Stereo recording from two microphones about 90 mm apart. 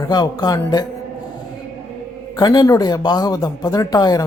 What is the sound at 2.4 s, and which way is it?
Speech, 45° left (ahead or behind).